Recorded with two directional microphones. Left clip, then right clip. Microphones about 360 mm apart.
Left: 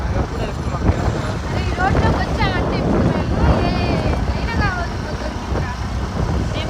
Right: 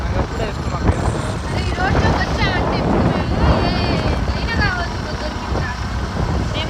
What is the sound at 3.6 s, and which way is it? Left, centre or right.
Vehicle, centre.